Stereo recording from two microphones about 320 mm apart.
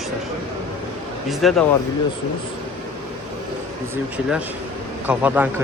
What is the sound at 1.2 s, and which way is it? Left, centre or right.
Speech, centre.